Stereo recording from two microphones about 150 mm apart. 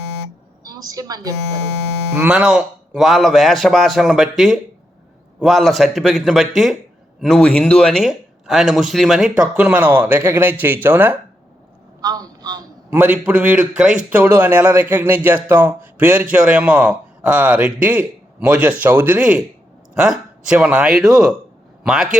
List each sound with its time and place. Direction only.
0.6 s a woman's voice: 25° right (ahead or behind)
2.1 s a man's voice: 5° right (ahead or behind)
12.0 s a sound: 25° right (ahead or behind)
12.9 s a man's voice: 10° right (ahead or behind)